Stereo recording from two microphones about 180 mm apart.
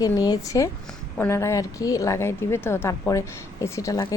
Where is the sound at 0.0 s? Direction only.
20° left (ahead or behind).